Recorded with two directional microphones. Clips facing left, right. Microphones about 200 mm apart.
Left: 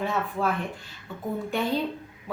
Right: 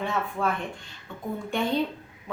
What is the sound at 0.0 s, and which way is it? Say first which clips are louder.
Speech: left 1 dB; centre (ahead or behind).